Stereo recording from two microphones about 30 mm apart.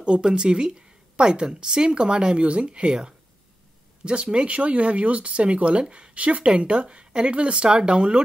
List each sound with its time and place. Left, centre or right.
0.0 s speech: right
2.9 s speech: right
6.1 s speech: right
6.4 s speech: right